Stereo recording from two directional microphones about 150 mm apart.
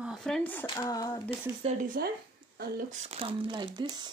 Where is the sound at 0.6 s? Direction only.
30° left (ahead or behind).